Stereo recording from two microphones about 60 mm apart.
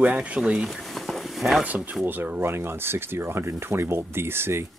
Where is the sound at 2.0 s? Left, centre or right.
Right.